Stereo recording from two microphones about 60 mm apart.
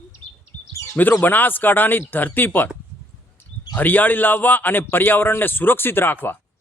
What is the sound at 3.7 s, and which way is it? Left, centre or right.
Speech, left.